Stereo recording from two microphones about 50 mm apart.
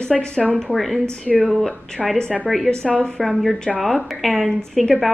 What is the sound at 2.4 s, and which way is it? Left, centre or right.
A woman's voice, centre.